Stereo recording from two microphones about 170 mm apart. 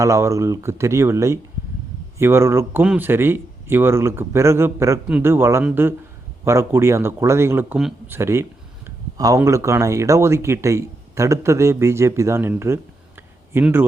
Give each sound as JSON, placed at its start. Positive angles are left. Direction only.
{"t": 0.0, "sound": "speech", "side_deg": -15}
{"t": 7.8, "sound": "speech", "side_deg": 0}
{"t": 8.1, "sound": "speech", "side_deg": -15}